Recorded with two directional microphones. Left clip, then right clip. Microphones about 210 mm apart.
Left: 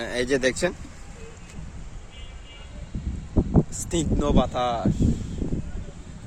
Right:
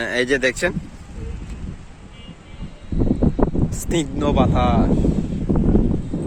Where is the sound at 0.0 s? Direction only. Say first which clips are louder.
Right 5 dB; centre (ahead or behind).